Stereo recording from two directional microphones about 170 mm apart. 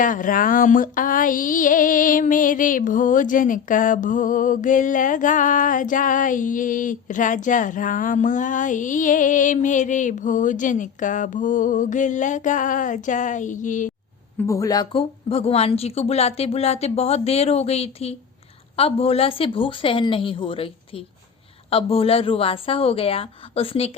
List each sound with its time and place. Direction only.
0.0 s a sound: 50° left (ahead or behind)
14.3 s speech: 20° left (ahead or behind)
14.9 s speech: 35° left (ahead or behind)